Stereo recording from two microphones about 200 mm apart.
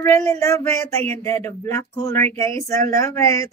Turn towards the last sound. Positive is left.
turn(degrees=15)  # may be behind; listen again after turning